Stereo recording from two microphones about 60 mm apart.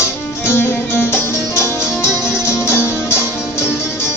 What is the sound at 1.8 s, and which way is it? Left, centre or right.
Music, centre.